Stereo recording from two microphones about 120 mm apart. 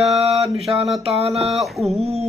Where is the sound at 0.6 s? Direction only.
55° right (ahead or behind).